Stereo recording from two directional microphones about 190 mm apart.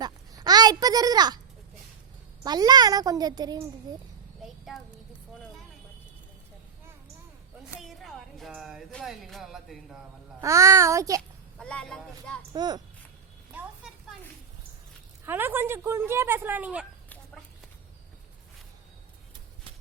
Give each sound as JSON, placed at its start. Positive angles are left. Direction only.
{"t": 0.0, "sound": "a sound", "side_deg": -20}
{"t": 2.4, "sound": "a woman's voice", "side_deg": -20}
{"t": 4.4, "sound": "a sound", "side_deg": 0}
{"t": 7.8, "sound": "speech", "side_deg": 0}
{"t": 10.4, "sound": "speech", "side_deg": -15}
{"t": 11.5, "sound": "speech", "side_deg": 5}
{"t": 12.5, "sound": "a woman's voice", "side_deg": -20}
{"t": 13.6, "sound": "a sound", "side_deg": -5}
{"t": 15.3, "sound": "speech", "side_deg": -10}